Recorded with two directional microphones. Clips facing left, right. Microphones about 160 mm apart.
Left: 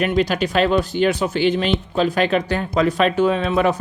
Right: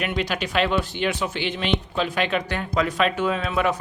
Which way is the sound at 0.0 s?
40° left (ahead or behind).